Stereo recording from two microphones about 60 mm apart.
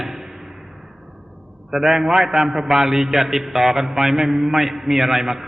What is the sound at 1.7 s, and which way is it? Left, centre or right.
A man's voice, centre.